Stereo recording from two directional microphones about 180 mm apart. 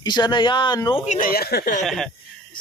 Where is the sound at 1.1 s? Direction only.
50° left (ahead or behind).